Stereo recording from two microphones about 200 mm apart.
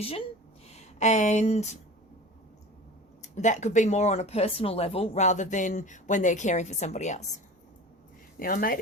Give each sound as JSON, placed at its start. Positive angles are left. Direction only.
{"t": 0.7, "sound": "speech", "side_deg": 35}
{"t": 3.2, "sound": "speech", "side_deg": 35}
{"t": 8.4, "sound": "speech", "side_deg": 45}